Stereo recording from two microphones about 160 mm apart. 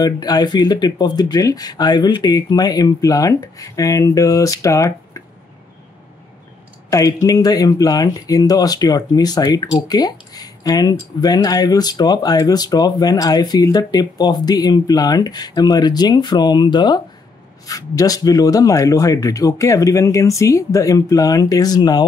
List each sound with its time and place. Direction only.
0.0 s speech: 25° left (ahead or behind)
6.9 s speech: 20° left (ahead or behind)